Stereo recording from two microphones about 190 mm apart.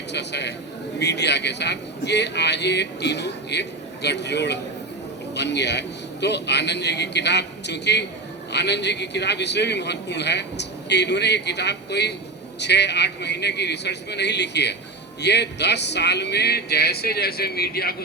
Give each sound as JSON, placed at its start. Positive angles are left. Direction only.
{"t": 0.1, "sound": "a man's voice", "side_deg": 65}